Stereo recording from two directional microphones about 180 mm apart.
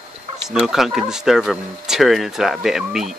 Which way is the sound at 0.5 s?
Centre (ahead or behind).